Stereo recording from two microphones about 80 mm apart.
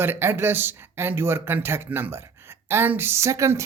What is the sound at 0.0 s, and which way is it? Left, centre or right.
Speech, right.